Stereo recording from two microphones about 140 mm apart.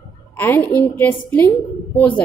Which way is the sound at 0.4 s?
15° left (ahead or behind).